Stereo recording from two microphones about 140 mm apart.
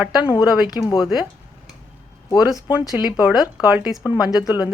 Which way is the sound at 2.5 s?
10° right (ahead or behind).